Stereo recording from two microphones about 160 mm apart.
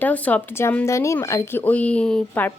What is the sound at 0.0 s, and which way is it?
A woman's voice, 10° left (ahead or behind).